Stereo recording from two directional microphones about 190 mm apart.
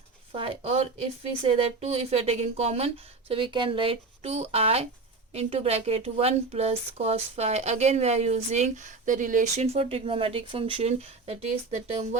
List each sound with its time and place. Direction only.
0.3 s a woman's voice: 30° right (ahead or behind)